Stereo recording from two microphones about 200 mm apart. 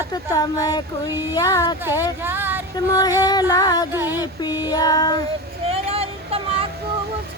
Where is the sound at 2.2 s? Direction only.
10° right (ahead or behind).